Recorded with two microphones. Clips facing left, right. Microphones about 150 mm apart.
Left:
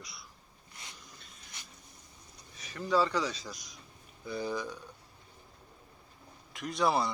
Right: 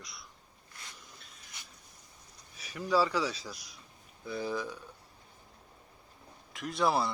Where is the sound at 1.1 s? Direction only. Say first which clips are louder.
Even; centre (ahead or behind).